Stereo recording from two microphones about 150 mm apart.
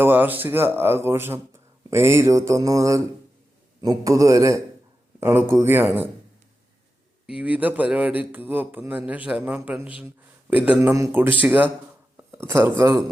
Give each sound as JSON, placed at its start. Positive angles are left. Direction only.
{"t": 0.0, "sound": "speech", "side_deg": -10}
{"t": 7.3, "sound": "speech", "side_deg": -10}